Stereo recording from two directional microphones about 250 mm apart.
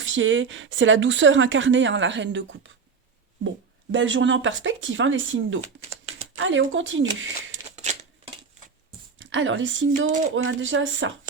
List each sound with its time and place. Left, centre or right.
0.0 s speech: right
3.9 s speech: right
7.5 s a sound: right
9.1 s speech: right